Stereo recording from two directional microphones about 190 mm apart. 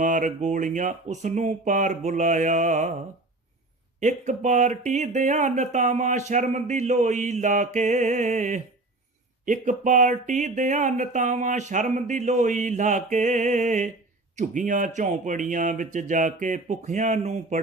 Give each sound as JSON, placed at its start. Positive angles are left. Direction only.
{"t": 0.0, "sound": "speech", "side_deg": -40}
{"t": 4.0, "sound": "speech", "side_deg": -40}